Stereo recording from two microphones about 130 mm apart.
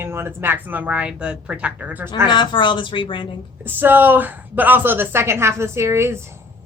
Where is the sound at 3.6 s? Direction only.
15° right (ahead or behind).